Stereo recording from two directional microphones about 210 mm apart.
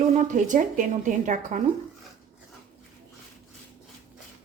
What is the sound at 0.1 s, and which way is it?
A woman's voice, 35° right (ahead or behind).